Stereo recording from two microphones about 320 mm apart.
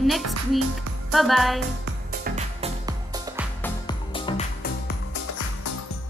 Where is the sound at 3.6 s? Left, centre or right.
Centre.